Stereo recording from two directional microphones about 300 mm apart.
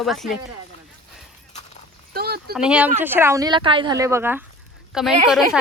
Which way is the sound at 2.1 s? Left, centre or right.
Right.